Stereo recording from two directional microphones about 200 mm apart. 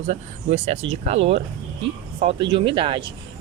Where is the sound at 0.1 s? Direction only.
35° right (ahead or behind).